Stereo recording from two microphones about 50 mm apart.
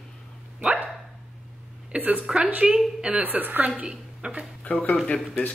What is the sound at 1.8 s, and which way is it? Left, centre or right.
Speech, right.